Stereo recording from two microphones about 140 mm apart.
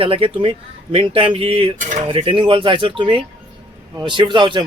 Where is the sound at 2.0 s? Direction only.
35° right (ahead or behind).